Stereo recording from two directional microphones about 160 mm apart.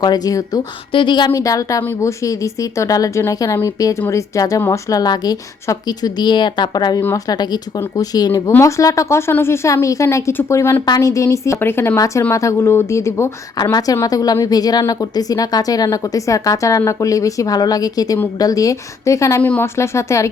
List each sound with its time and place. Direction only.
0.0 s a woman's voice: 25° left (ahead or behind)